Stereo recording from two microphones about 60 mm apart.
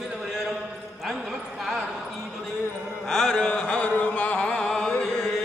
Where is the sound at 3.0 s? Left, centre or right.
Centre; by 4.6 s left.